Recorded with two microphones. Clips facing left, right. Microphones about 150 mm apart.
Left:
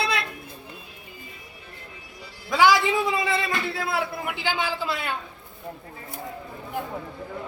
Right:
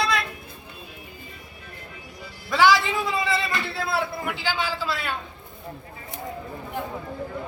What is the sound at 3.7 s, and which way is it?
A man's voice, 15° left (ahead or behind).